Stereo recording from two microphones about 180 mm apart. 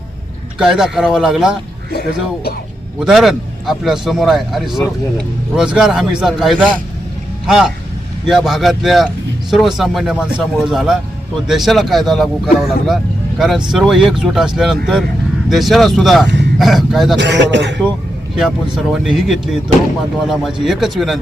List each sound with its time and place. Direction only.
0.6 s a man's voice: 5° right (ahead or behind)
1.9 s speech: 60° left (ahead or behind)
3.0 s a man's voice: centre (ahead or behind)
17.2 s a man's voice: 75° right (ahead or behind)
18.3 s a man's voice: 5° right (ahead or behind)